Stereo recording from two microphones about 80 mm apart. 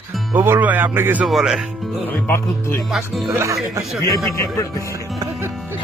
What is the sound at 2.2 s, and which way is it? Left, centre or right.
Speech, left.